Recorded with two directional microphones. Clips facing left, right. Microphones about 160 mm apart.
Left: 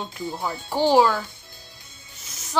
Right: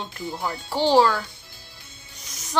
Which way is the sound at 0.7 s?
10° left (ahead or behind).